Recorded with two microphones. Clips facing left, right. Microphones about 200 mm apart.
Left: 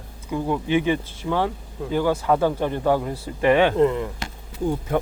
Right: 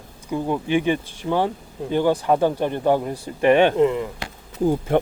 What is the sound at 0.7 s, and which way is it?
Speech, 20° right (ahead or behind).